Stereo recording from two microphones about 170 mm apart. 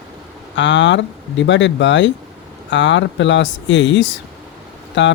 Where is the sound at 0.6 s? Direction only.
90° left.